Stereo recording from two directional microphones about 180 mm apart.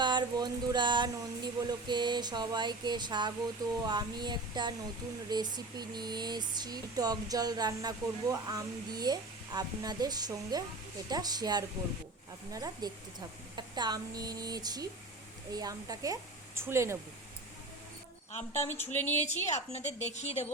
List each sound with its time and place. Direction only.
0.0 s speech: 25° right (ahead or behind)
18.5 s speech: 15° left (ahead or behind)
19.7 s a woman's voice: 40° left (ahead or behind)